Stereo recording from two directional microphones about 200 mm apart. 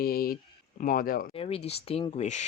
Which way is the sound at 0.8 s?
45° left (ahead or behind).